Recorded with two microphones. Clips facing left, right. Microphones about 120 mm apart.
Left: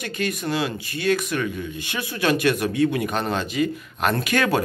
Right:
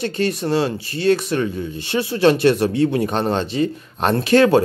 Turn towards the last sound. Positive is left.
turn(degrees=-25)  # may be behind; listen again after turning